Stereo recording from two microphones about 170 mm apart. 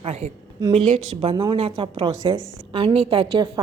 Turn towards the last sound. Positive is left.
turn(degrees=-30)  # may be behind; listen again after turning